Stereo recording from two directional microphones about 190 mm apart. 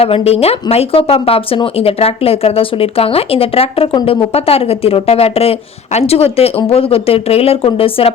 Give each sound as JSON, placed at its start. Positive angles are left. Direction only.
{"t": 0.0, "sound": "speech", "side_deg": 30}